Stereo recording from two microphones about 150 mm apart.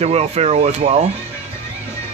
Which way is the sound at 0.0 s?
45° right (ahead or behind).